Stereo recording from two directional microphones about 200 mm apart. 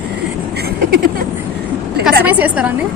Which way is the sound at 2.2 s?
10° right (ahead or behind).